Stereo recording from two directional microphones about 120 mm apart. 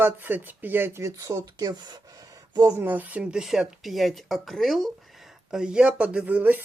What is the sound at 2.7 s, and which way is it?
Speech, 15° right (ahead or behind).